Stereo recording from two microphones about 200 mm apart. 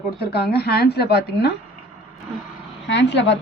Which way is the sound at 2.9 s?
60° left (ahead or behind).